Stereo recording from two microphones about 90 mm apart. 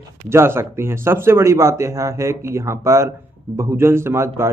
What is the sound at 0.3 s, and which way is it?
A man's voice, 30° right (ahead or behind).